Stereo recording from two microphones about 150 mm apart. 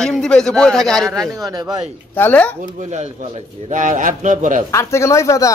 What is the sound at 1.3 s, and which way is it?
Speech, 25° right (ahead or behind).